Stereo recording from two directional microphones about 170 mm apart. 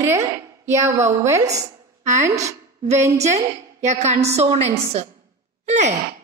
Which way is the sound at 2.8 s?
40° right (ahead or behind).